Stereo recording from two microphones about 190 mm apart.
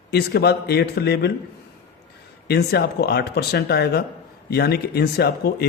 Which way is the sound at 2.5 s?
60° left (ahead or behind).